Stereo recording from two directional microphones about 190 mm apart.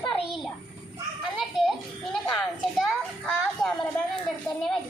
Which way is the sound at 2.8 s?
5° left (ahead or behind).